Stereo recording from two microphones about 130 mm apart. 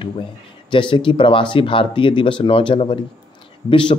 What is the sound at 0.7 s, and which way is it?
Speech, 40° left (ahead or behind).